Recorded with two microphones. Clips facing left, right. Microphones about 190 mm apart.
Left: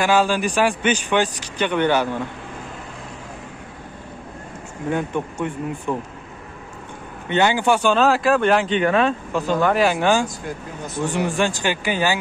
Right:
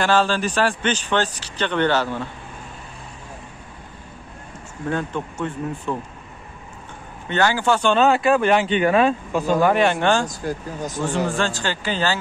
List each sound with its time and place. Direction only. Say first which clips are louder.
0.0 s speech: left 1 dB; 10° left (ahead or behind)
4.8 s speech: left 2 dB; 15° left (ahead or behind)
7.2 s speech: left 2 dB; 20° left (ahead or behind)
7.9 s speech: right 3 dB; centre (ahead or behind)
10.2 s speech: right 2 dB; 40° right (ahead or behind)
11.1 s speech: left 2 dB; 15° left (ahead or behind)